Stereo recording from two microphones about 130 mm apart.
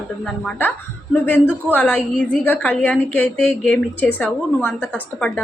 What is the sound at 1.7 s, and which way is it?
A woman's voice, 15° left (ahead or behind).